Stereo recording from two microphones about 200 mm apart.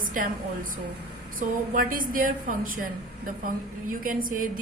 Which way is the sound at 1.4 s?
45° right (ahead or behind).